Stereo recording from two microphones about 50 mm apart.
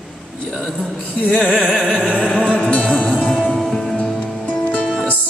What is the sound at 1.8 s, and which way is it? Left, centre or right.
Music, right.